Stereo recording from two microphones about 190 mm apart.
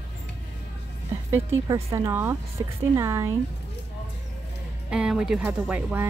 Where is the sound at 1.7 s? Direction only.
15° right (ahead or behind).